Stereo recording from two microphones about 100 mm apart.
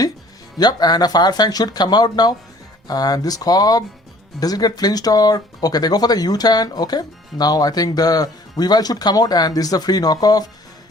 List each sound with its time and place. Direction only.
0.6 s speech: 45° left (ahead or behind)